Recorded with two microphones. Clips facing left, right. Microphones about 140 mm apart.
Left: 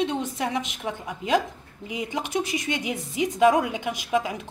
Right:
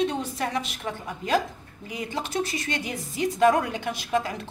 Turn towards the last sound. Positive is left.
turn(degrees=15)  # may be behind; listen again after turning